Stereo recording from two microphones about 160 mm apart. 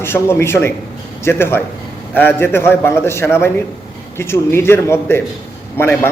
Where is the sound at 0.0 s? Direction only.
15° left (ahead or behind).